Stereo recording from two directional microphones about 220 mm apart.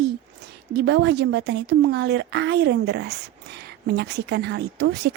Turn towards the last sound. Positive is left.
turn(degrees=-50)  # may be behind; listen again after turning